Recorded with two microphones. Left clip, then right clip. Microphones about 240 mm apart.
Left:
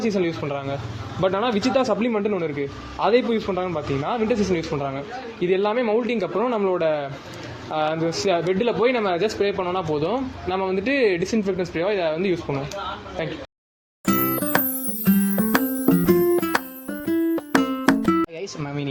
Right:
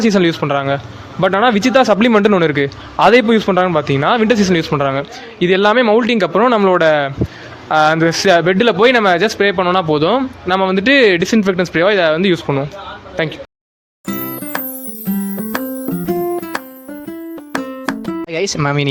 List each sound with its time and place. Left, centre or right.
0.0 s a man's voice: right
14.0 s music: centre
18.3 s speech: right